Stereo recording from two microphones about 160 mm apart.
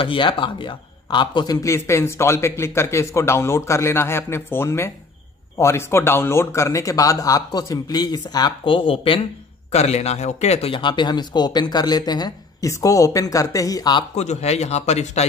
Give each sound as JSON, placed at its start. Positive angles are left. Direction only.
{"t": 0.0, "sound": "speech", "side_deg": 30}
{"t": 14.1, "sound": "a man's voice", "side_deg": 45}